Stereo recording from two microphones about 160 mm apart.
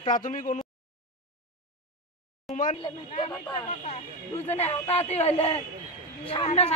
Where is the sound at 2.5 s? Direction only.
55° left (ahead or behind).